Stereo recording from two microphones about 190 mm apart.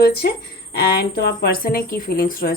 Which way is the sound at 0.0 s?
55° left (ahead or behind).